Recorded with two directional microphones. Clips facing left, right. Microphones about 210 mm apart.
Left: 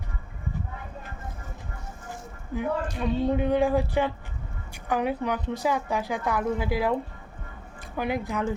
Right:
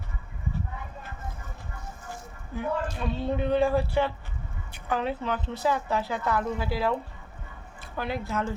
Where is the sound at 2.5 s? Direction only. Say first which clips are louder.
Left 2 dB; 15° left (ahead or behind).